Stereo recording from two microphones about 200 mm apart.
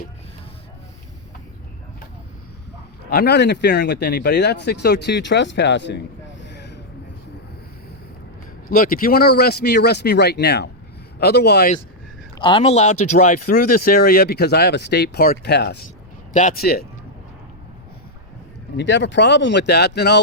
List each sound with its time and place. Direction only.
3.1 s speech: 55° left (ahead or behind)
8.7 s speech: 45° left (ahead or behind)
12.4 s speech: 25° left (ahead or behind); by 15.8 s 55° left (ahead or behind)
16.3 s speech: 35° left (ahead or behind)
18.8 s speech: 65° left (ahead or behind)